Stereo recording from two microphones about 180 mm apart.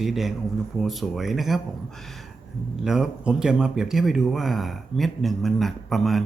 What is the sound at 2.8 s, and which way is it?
Speech, 5° right (ahead or behind).